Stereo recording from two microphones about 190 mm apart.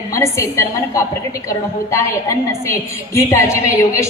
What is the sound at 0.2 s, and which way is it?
Speech, 15° left (ahead or behind).